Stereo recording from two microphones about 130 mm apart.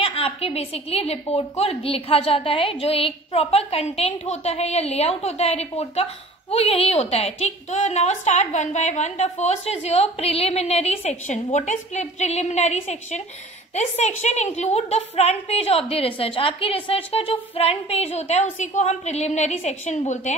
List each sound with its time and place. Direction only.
0.0 s a woman's voice: 50° left (ahead or behind)